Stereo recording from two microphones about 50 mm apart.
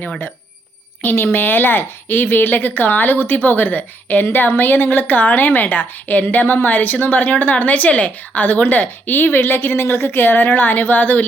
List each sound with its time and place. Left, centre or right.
1.0 s a woman's voice: left
4.3 s a woman's voice: left